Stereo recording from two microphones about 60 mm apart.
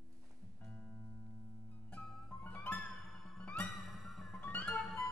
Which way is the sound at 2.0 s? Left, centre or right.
Left.